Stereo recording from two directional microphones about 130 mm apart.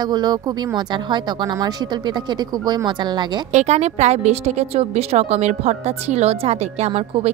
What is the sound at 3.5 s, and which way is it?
A woman's voice, 60° right (ahead or behind).